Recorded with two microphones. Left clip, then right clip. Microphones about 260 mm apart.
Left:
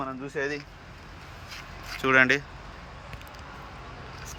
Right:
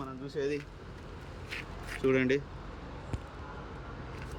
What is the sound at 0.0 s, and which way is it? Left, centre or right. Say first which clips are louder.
Vehicle: left 5 dB; left.